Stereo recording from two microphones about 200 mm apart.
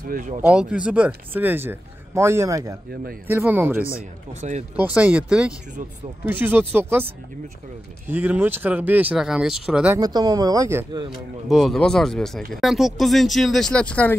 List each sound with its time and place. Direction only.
0.0 s speech: 40° right (ahead or behind)
0.5 s speech: 5° right (ahead or behind)
4.3 s speech: 35° right (ahead or behind)
4.7 s speech: 10° right (ahead or behind)
9.9 s speech: 20° right (ahead or behind)
11.4 s speech: centre (ahead or behind)